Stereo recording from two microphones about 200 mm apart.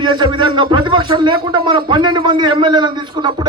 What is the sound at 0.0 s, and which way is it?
A man's voice, 25° right (ahead or behind).